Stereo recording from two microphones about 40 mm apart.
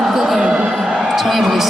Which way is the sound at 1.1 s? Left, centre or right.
Centre.